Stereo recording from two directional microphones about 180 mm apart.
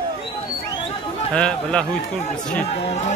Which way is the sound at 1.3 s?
5° left (ahead or behind).